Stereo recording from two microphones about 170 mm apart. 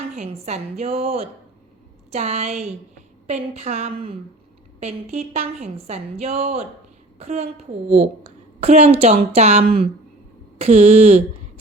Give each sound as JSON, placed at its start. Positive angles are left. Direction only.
{"t": 0.2, "sound": "a woman's voice", "side_deg": -40}